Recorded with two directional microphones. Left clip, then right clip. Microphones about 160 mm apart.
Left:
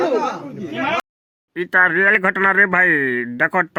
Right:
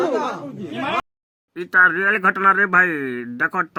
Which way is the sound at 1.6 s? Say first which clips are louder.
Left 1 dB; 25° left (ahead or behind).